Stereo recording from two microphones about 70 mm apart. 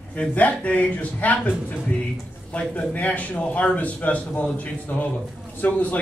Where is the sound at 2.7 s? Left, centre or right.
Left.